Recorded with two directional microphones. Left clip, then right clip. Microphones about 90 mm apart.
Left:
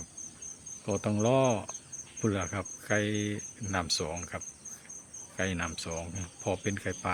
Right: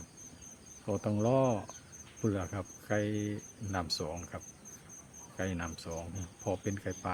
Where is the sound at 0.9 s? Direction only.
40° left (ahead or behind).